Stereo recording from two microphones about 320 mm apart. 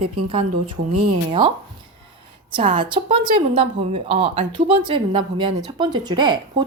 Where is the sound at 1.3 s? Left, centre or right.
Centre.